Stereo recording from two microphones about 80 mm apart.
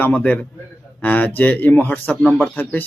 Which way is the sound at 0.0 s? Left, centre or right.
Centre.